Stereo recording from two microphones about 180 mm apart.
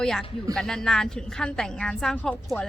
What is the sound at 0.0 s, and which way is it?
A woman's voice, 5° left (ahead or behind).